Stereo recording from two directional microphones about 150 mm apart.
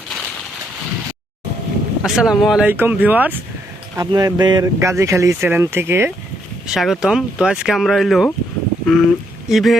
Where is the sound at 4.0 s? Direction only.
25° right (ahead or behind).